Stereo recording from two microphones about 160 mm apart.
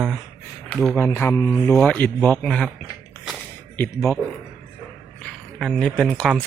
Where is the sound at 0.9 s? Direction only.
15° left (ahead or behind).